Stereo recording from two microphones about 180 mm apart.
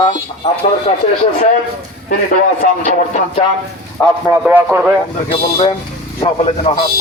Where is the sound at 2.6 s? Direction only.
45° left (ahead or behind).